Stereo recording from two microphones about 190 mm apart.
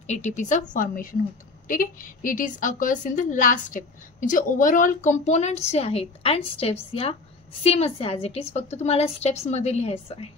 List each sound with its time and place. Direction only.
0.0 s a woman's voice: 40° left (ahead or behind)